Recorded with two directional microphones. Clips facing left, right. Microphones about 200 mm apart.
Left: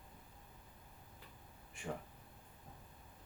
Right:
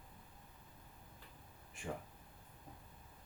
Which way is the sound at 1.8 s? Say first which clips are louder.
Even; centre (ahead or behind).